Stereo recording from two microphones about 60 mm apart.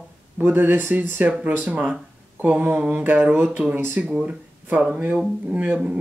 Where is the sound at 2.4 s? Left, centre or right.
Right.